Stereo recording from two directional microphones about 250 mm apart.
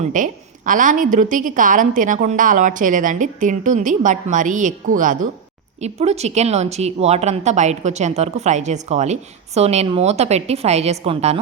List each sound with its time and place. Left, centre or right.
0.0 s a woman's voice: right